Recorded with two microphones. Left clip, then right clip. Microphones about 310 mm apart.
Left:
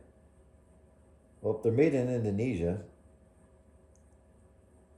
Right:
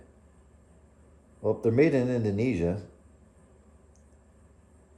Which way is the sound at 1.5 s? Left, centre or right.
Centre.